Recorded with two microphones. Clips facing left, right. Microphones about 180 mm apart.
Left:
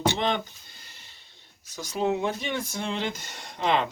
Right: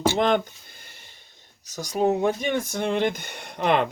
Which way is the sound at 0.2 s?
50° right (ahead or behind).